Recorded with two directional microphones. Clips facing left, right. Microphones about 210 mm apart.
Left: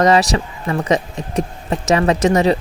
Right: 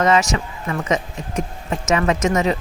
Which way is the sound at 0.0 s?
35° left (ahead or behind).